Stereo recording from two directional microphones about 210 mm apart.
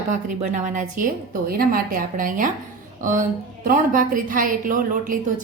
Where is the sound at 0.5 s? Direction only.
40° right (ahead or behind).